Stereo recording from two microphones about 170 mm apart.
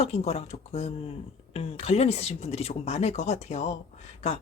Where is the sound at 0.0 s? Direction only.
40° left (ahead or behind).